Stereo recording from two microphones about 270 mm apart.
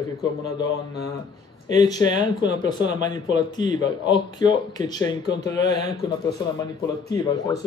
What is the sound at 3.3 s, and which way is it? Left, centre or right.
A man's voice, centre.